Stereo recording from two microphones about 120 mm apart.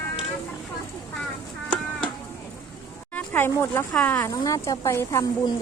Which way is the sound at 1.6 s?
10° left (ahead or behind).